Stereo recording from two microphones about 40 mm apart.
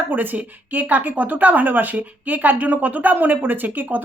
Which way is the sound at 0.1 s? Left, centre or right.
Right.